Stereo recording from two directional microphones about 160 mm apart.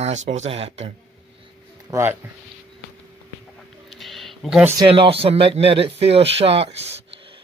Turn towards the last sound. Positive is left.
turn(degrees=-35)  # may be behind; listen again after turning